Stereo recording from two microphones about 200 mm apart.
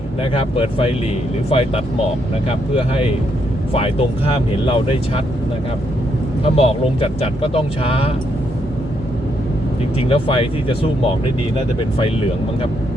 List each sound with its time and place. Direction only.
0.2 s speech: 30° left (ahead or behind)
6.4 s speech: 30° left (ahead or behind)
10.1 s speech: 30° left (ahead or behind)